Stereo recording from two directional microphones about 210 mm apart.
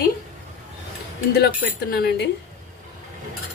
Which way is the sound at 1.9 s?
50° left (ahead or behind).